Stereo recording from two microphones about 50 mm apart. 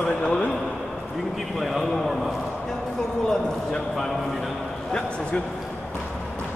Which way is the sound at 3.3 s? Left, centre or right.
Centre.